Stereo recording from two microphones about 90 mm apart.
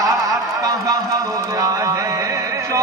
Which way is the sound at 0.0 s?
40° right (ahead or behind).